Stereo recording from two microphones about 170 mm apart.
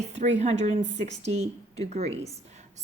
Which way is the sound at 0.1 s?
40° right (ahead or behind).